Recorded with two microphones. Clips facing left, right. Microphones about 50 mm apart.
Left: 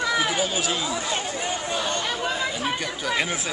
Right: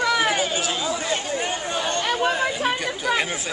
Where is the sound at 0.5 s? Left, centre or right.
Centre.